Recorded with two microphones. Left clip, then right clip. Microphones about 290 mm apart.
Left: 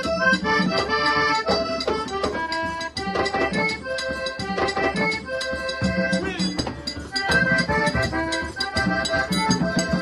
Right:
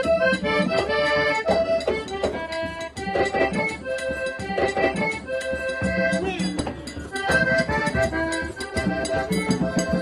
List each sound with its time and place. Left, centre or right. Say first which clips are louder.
0.0 s accordion: even; centre
1.7 s music: right 1 dB; centre
7.3 s music: left 1 dB; centre